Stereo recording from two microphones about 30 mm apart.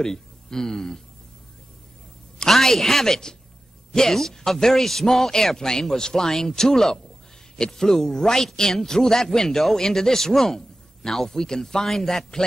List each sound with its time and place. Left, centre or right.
0.0 s speech: centre
2.4 s a woman's voice: centre